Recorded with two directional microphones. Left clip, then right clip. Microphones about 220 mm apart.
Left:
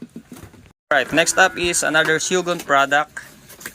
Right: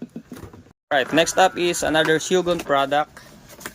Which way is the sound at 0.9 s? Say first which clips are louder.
Left 2 dB; 15° right (ahead or behind).